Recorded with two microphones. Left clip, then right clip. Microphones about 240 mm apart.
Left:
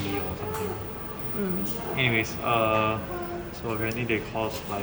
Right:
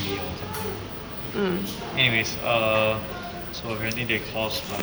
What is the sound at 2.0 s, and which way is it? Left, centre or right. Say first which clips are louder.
Speech: right 4 dB; centre.